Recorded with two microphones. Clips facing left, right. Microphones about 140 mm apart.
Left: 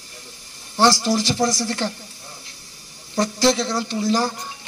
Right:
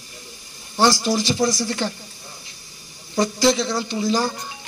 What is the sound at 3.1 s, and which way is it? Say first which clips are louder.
Speech: even; 15° right (ahead or behind).